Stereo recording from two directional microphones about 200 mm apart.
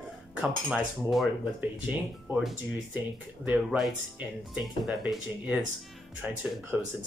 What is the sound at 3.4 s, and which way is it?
Speech, 5° right (ahead or behind).